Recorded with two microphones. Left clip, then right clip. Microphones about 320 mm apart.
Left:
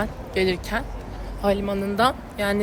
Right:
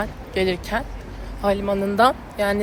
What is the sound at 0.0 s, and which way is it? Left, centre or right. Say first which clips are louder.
Speech: right 1 dB; centre.